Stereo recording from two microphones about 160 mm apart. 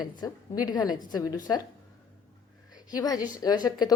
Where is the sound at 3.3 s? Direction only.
25° left (ahead or behind).